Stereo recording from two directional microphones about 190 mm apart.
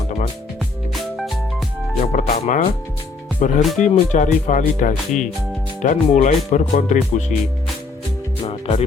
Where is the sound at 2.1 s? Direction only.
35° left (ahead or behind).